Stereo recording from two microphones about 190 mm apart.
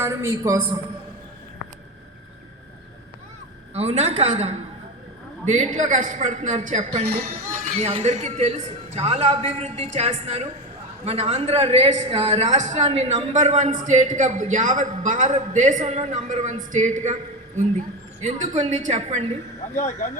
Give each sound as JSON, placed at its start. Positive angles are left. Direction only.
{"t": 0.0, "sound": "a man's voice", "side_deg": -15}
{"t": 3.8, "sound": "a woman's voice", "side_deg": -35}
{"t": 18.2, "sound": "a woman's voice", "side_deg": -40}
{"t": 19.7, "sound": "speech", "side_deg": 40}